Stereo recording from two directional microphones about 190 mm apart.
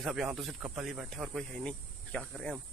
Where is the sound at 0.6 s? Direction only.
10° right (ahead or behind).